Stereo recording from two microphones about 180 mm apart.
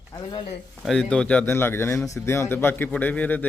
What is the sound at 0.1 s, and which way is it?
Speech, 25° left (ahead or behind).